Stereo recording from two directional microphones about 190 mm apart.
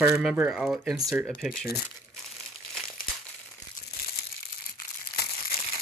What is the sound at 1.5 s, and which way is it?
Speech, 50° left (ahead or behind).